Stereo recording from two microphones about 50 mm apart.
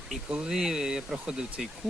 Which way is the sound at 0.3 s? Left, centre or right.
Centre.